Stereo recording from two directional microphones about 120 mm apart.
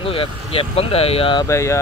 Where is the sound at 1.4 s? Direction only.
25° left (ahead or behind).